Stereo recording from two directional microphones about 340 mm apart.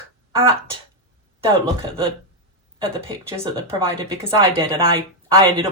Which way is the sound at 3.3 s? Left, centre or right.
Centre.